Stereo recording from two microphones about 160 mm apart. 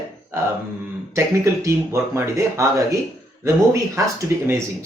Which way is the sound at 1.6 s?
15° right (ahead or behind).